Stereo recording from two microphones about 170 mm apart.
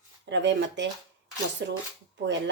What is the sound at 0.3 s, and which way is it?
Speech, 90° right.